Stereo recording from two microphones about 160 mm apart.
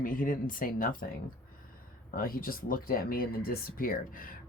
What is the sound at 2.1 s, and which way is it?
Speech, 65° left (ahead or behind).